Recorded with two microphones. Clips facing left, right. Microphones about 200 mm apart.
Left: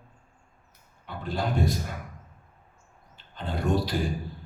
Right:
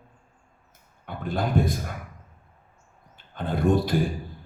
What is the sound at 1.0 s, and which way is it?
Speech, 50° right (ahead or behind).